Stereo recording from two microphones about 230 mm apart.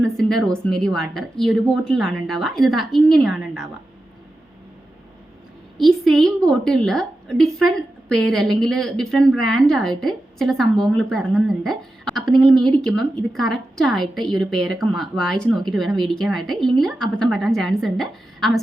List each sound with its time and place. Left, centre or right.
0.0 s a woman's voice: centre
5.7 s a woman's voice: centre